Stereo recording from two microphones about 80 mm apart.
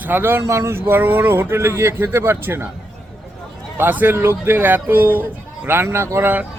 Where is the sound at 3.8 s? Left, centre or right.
Right.